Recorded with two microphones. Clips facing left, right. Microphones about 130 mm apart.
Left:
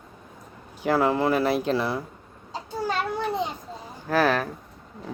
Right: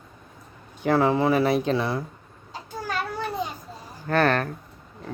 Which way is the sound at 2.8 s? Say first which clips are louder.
Left 2 dB; 20° left (ahead or behind).